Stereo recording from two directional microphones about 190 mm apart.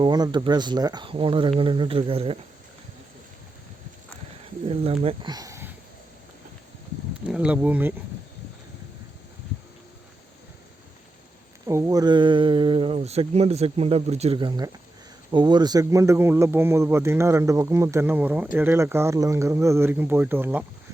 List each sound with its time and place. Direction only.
0.0 s speech: 20° right (ahead or behind)
4.7 s speech: 30° right (ahead or behind); by 5.7 s 15° right (ahead or behind)
7.3 s speech: 5° right (ahead or behind)
11.6 s speech: 15° right (ahead or behind)